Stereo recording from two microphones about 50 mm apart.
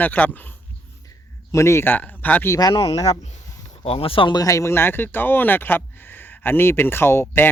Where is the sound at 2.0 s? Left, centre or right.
Left.